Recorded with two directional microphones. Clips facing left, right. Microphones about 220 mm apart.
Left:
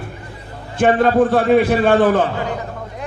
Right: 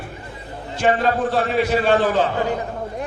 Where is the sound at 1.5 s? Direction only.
55° left (ahead or behind).